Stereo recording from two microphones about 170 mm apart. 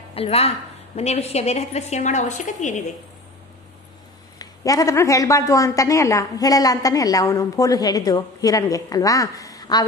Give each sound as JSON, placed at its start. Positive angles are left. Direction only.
{"t": 0.1, "sound": "a woman's voice", "side_deg": 35}
{"t": 4.4, "sound": "a woman's voice", "side_deg": 20}